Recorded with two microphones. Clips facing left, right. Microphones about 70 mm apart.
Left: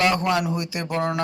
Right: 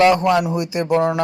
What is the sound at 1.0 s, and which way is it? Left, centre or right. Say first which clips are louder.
Speech: right 4 dB; centre.